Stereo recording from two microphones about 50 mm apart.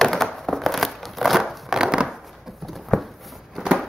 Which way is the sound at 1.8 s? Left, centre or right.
Centre.